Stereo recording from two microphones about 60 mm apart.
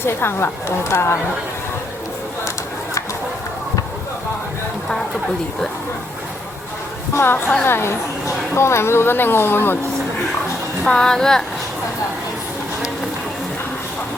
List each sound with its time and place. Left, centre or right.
0.0 s speech: left
7.1 s speech: left
10.8 s speech: centre